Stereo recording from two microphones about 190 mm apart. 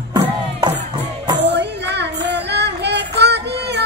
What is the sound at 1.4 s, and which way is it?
Music, 65° right (ahead or behind).